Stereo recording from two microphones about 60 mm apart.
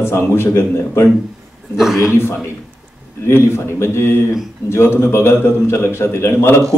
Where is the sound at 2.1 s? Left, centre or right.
Left.